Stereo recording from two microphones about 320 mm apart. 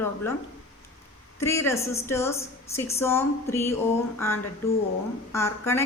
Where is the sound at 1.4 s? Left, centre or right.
Centre.